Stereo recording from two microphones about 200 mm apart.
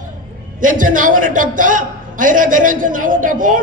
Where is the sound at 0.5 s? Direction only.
40° right (ahead or behind).